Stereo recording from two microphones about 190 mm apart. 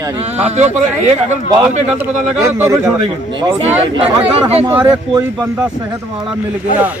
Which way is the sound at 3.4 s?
25° right (ahead or behind).